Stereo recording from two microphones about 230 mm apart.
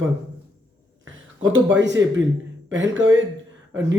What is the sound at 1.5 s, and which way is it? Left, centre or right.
Speech, right.